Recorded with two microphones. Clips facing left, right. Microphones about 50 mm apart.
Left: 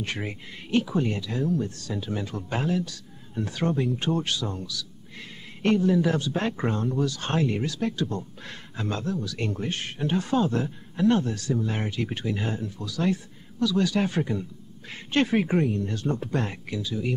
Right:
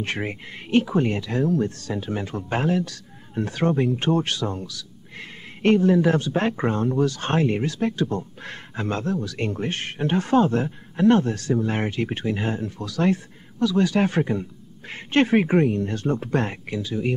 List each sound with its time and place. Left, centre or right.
0.1 s speech: right
3.6 s speech: right
4.2 s speech: right
4.7 s a sound: right
5.8 s speech: right
12.6 s speech: right
13.6 s speech: right
15.6 s speech: right